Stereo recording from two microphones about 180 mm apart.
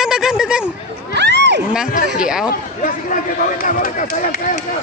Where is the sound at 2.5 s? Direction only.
50° left (ahead or behind).